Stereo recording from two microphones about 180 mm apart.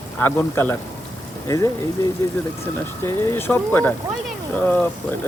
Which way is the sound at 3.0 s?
10° left (ahead or behind).